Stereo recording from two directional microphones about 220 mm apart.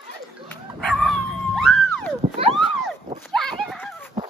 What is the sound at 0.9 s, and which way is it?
Dog, centre (ahead or behind).